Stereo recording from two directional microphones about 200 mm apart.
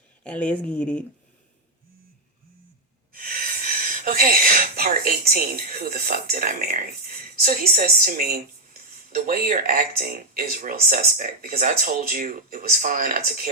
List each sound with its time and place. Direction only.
0.3 s speech: 5° left (ahead or behind)
3.1 s speech: 45° right (ahead or behind)